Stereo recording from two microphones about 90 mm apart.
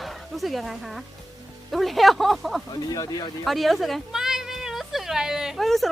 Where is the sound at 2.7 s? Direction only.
45° left (ahead or behind).